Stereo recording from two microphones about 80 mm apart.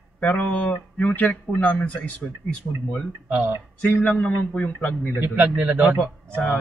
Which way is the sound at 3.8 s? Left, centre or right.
Centre.